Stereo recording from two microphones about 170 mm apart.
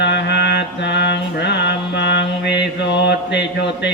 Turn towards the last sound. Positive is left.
turn(degrees=90)